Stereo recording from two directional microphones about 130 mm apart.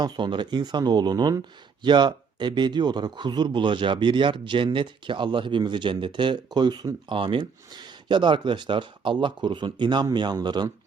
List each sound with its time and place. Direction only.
0.0 s speech: 35° right (ahead or behind)